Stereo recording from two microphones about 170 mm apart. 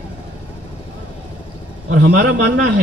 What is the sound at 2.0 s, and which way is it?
Speech, 90° right.